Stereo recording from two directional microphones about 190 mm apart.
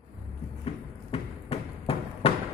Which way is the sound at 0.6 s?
30° left (ahead or behind).